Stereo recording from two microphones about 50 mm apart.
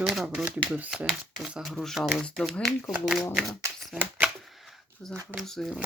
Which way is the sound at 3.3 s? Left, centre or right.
Centre.